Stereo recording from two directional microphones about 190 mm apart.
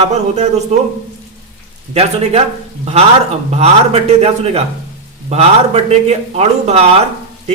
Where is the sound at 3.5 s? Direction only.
35° right (ahead or behind).